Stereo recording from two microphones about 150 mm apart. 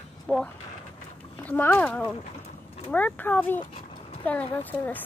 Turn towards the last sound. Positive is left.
turn(degrees=10)  # may be behind; listen again after turning